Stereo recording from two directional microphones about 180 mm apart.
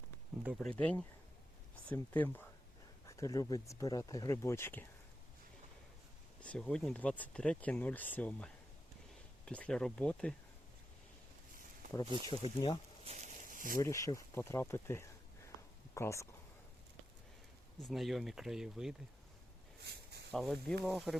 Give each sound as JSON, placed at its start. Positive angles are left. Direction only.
{"t": 0.4, "sound": "speech", "side_deg": 5}
{"t": 6.4, "sound": "speech", "side_deg": 5}
{"t": 9.5, "sound": "speech", "side_deg": 5}
{"t": 12.5, "sound": "speech", "side_deg": 25}
{"t": 13.1, "sound": "a sound", "side_deg": -40}
{"t": 13.7, "sound": "speech", "side_deg": 20}
{"t": 17.7, "sound": "speech", "side_deg": 0}
{"t": 19.8, "sound": "a sound", "side_deg": -65}
{"t": 20.3, "sound": "speech", "side_deg": 0}